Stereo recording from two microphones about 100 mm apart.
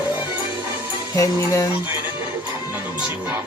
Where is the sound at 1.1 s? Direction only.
35° left (ahead or behind).